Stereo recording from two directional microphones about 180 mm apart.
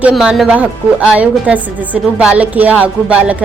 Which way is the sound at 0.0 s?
5° right (ahead or behind).